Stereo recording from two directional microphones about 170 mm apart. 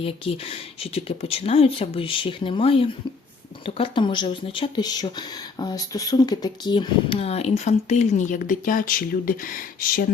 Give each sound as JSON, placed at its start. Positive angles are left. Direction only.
{"t": 0.0, "sound": "speech", "side_deg": 35}